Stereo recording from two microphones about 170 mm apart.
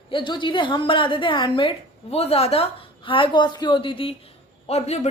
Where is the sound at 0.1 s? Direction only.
30° left (ahead or behind).